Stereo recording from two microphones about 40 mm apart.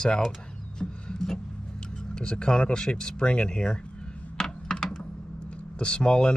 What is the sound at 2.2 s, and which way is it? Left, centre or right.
Speech, left.